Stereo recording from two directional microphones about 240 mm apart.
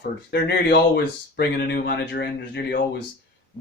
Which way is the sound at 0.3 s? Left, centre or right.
Left.